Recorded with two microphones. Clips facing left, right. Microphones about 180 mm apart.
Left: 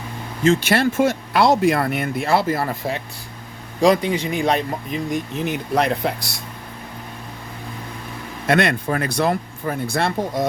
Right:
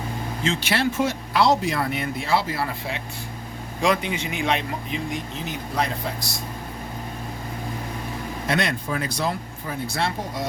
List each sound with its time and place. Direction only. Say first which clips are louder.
0.4 s speech: left 7 dB; 45° left (ahead or behind)
5.5 s speech: left 7 dB; 65° left (ahead or behind)
8.4 s speech: left 7 dB; 60° left (ahead or behind)